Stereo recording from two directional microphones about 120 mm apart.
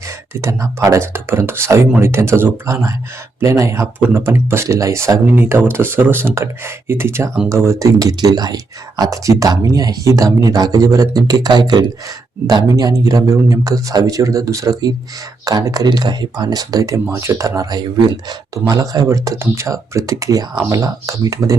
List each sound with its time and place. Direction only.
0.0 s speech: 25° right (ahead or behind)